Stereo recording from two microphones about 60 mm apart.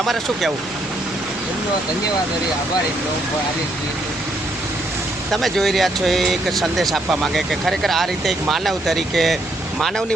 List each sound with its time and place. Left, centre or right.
0.0 s speech: centre
5.3 s speech: centre